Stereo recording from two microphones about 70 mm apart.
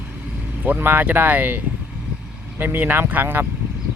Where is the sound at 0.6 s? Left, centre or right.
Right.